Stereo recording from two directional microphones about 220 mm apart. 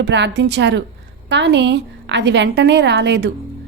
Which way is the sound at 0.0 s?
55° right (ahead or behind).